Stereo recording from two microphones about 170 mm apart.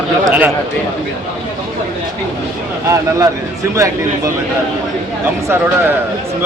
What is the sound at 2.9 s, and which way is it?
Speech, 20° right (ahead or behind).